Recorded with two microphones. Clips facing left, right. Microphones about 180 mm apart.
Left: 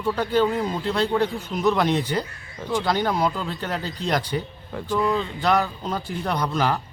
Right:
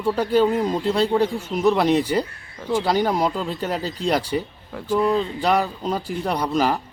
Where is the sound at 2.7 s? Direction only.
10° right (ahead or behind).